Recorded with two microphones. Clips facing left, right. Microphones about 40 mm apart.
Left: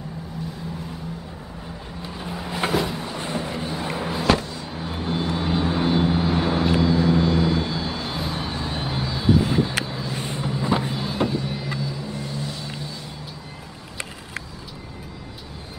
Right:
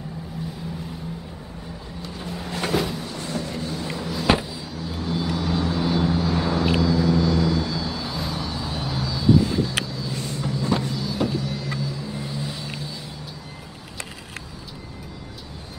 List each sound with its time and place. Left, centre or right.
2.0 s vehicle: centre
3.2 s train: left
3.8 s a sound: left
4.3 s a sound: centre
4.7 s vehicle: left
11.2 s music: left
11.8 s vehicle: centre